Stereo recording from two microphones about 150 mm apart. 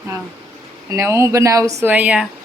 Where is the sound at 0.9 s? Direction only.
20° right (ahead or behind).